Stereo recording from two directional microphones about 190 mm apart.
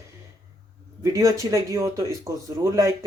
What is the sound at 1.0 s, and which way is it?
Speech, 15° right (ahead or behind).